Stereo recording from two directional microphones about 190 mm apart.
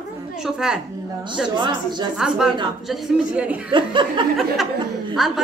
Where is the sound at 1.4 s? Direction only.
25° right (ahead or behind).